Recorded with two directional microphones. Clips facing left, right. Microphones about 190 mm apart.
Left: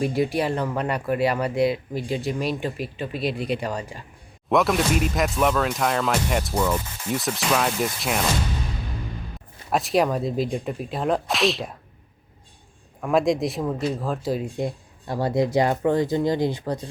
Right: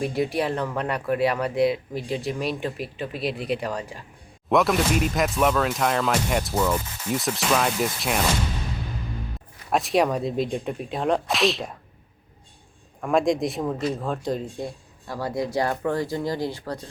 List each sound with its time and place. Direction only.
0.0 s speech: centre (ahead or behind)
9.6 s speech: centre (ahead or behind)
13.0 s speech: centre (ahead or behind)
14.6 s speech: 25° left (ahead or behind)